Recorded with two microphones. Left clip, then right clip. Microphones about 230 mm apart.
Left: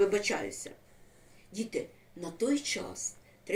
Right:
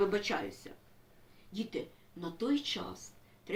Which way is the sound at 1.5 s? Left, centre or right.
Centre.